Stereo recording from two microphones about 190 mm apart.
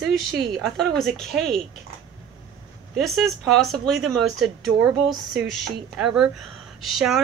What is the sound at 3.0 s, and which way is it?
A woman's voice, centre (ahead or behind).